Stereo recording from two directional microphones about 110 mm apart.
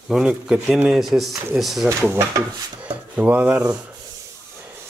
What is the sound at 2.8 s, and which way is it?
Speech, 10° right (ahead or behind).